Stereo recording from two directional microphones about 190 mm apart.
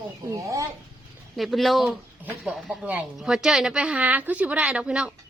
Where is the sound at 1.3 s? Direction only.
Centre (ahead or behind).